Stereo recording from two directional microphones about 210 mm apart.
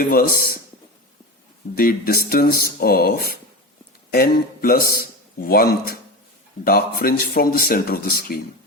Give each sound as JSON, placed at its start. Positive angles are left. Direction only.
{"t": 0.1, "sound": "speech", "side_deg": 45}
{"t": 1.7, "sound": "speech", "side_deg": 45}